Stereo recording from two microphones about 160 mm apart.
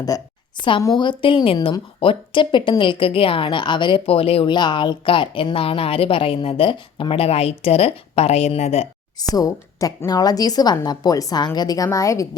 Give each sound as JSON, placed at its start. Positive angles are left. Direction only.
{"t": 0.1, "sound": "a woman's voice", "side_deg": 20}
{"t": 9.3, "sound": "a woman's voice", "side_deg": 20}